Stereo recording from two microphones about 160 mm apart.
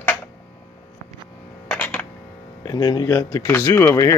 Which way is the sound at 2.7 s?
25° left (ahead or behind).